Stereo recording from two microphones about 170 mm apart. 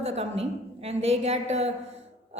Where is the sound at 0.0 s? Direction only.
35° right (ahead or behind).